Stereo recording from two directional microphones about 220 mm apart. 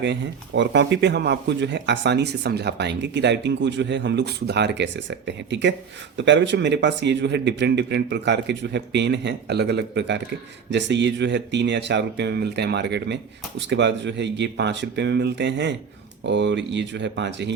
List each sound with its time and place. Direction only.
0.0 s speech: 55° right (ahead or behind)